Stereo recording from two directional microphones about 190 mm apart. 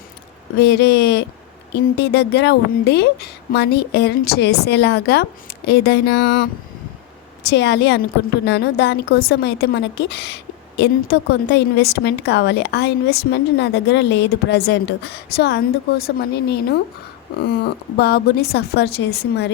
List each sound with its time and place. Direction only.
0.6 s a woman's voice: 60° left (ahead or behind)
17.6 s a woman's voice: 55° left (ahead or behind)